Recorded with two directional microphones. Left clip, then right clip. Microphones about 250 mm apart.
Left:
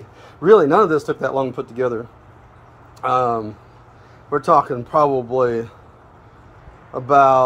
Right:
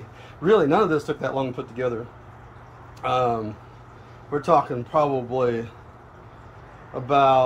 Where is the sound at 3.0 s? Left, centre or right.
Centre.